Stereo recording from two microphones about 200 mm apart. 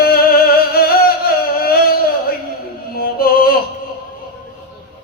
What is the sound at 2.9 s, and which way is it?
Music, 50° left (ahead or behind).